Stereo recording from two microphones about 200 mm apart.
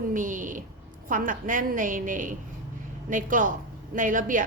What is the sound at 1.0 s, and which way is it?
A woman's voice, 40° right (ahead or behind).